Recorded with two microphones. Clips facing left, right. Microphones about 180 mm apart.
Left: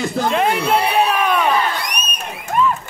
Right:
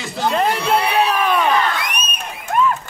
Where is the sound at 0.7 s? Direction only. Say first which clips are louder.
Left 1 dB; 5° left (ahead or behind).